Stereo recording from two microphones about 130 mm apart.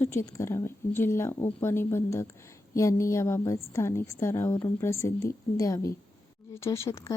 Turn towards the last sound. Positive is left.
turn(degrees=20)  # may be behind; listen again after turning